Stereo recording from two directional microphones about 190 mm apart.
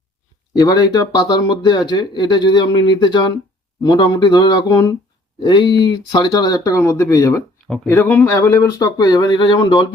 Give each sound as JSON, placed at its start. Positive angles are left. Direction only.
{"t": 0.5, "sound": "speech", "side_deg": 20}